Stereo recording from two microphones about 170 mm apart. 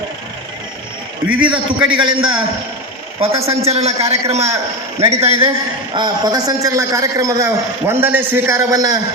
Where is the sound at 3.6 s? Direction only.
35° right (ahead or behind).